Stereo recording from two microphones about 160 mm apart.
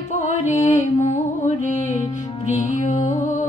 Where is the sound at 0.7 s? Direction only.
50° left (ahead or behind).